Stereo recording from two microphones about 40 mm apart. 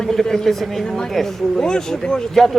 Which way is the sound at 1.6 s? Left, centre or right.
Centre.